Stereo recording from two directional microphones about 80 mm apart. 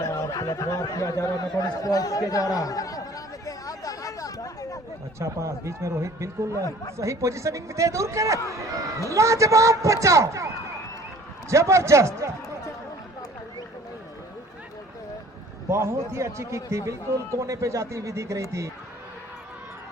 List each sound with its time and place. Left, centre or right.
0.0 s a sound: left
5.2 s a man's voice: right
15.7 s a man's voice: right